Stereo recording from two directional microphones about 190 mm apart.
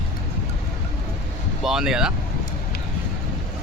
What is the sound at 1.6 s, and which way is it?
Speech, 5° right (ahead or behind).